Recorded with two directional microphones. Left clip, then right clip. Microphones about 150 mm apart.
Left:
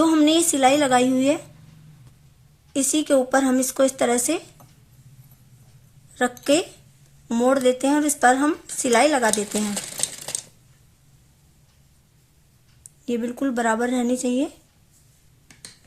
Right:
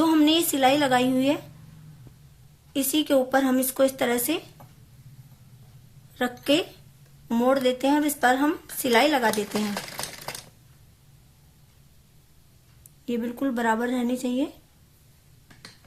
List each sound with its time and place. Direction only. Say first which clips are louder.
0.0 s a woman's voice: left 3 dB; 30° left (ahead or behind)
2.7 s speech: left 3 dB; 35° left (ahead or behind)
6.1 s speech: left 3 dB; 35° left (ahead or behind)
9.7 s a sound: left 3 dB; centre (ahead or behind)
13.1 s speech: left 3 dB; 40° left (ahead or behind)